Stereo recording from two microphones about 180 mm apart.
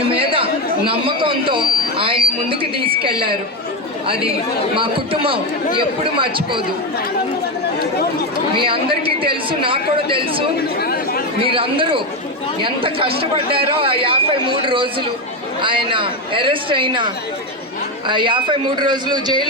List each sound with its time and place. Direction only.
0.0 s chatter: 30° right (ahead or behind)
4.0 s speech: 30° right (ahead or behind)
8.5 s speech: 30° right (ahead or behind)
10.8 s chatter: 55° left (ahead or behind)
11.4 s speech: 30° right (ahead or behind)
18.1 s speech: 25° right (ahead or behind)